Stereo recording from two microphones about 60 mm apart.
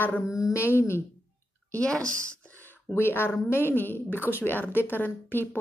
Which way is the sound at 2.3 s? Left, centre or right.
Left.